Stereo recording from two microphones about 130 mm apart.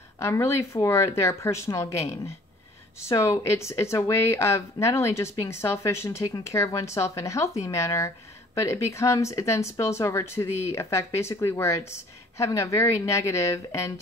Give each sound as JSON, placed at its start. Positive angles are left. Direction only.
{"t": 0.2, "sound": "speech", "side_deg": 20}